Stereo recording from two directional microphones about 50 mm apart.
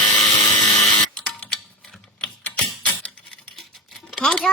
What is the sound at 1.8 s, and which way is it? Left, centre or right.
Typing, centre.